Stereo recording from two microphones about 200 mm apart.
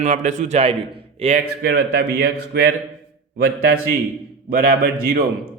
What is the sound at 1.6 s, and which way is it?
A man's voice, 50° right (ahead or behind).